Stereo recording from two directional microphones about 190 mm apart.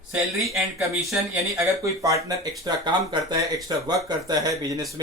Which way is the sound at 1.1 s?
15° right (ahead or behind).